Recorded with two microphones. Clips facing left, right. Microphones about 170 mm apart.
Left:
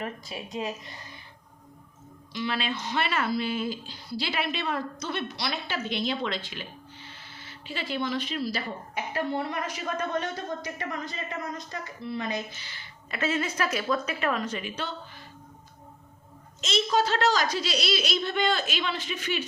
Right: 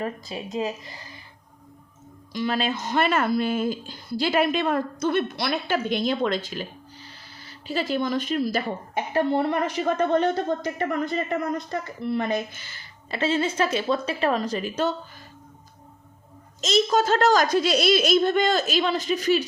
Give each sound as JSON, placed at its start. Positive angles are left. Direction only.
{"t": 0.3, "sound": "a woman's voice", "side_deg": -30}
{"t": 2.3, "sound": "a woman's voice", "side_deg": -45}
{"t": 13.1, "sound": "a woman's voice", "side_deg": -30}
{"t": 16.6, "sound": "speech", "side_deg": -40}